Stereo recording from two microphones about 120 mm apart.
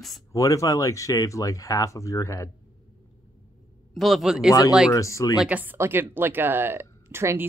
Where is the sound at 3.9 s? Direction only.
Centre (ahead or behind).